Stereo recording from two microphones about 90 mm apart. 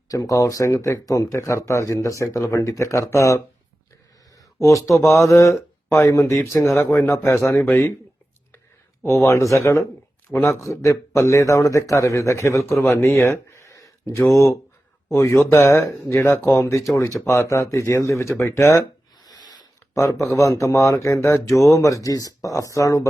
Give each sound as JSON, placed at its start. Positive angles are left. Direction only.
{"t": 0.1, "sound": "speech", "side_deg": 40}
{"t": 4.6, "sound": "speech", "side_deg": 35}
{"t": 9.0, "sound": "speech", "side_deg": 35}
{"t": 13.2, "sound": "a sound", "side_deg": 30}
{"t": 14.3, "sound": "speech", "side_deg": 35}
{"t": 19.2, "sound": "a sound", "side_deg": 45}
{"t": 20.0, "sound": "speech", "side_deg": 35}